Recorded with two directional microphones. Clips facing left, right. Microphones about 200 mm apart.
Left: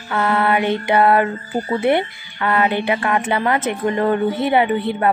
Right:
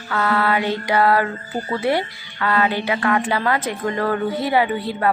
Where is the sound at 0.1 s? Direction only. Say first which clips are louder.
Left 2 dB; 20° left (ahead or behind).